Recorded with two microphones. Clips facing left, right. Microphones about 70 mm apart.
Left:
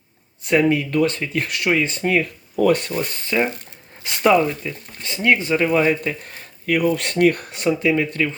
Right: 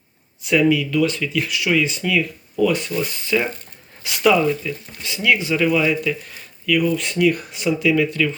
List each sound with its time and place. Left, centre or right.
0.4 s speech: left
3.2 s speech: left
7.7 s speech: left